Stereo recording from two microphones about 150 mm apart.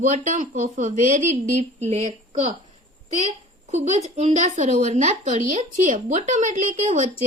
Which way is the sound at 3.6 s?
50° right (ahead or behind).